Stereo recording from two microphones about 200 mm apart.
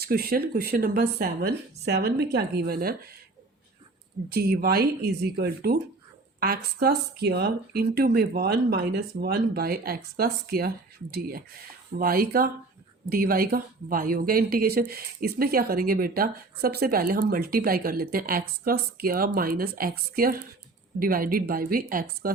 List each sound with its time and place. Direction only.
0.0 s speech: 50° right (ahead or behind)
4.3 s speech: 50° right (ahead or behind)